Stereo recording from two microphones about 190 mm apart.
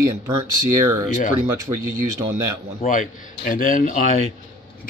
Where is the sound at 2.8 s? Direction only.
45° left (ahead or behind).